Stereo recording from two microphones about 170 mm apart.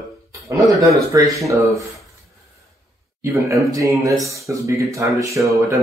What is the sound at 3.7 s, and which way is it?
Speech, 20° right (ahead or behind).